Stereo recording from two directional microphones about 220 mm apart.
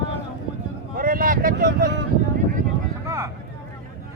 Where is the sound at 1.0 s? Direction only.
40° right (ahead or behind).